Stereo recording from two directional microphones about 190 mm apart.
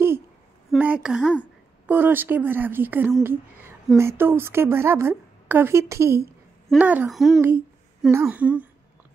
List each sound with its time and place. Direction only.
0.7 s speech: 5° right (ahead or behind)